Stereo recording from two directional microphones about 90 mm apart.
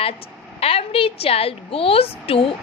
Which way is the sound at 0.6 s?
90° left.